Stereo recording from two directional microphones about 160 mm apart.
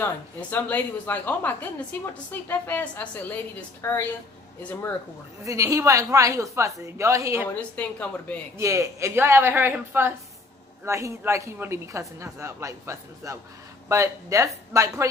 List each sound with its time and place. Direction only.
0.5 s a woman's voice: 10° left (ahead or behind)
5.5 s a woman's voice: 20° right (ahead or behind)
7.8 s a woman's voice: 10° left (ahead or behind)
8.5 s a woman's voice: 20° right (ahead or behind)